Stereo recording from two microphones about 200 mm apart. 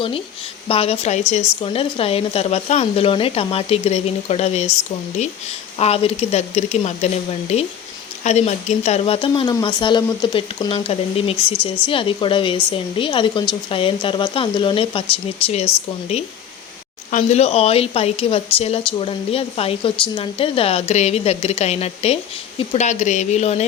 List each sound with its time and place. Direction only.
0.7 s speech: 30° left (ahead or behind)
5.8 s speech: 30° left (ahead or behind)
17.1 s speech: 35° left (ahead or behind)